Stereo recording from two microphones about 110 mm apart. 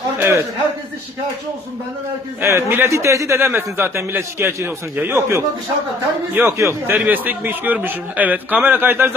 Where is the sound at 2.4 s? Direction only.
25° right (ahead or behind).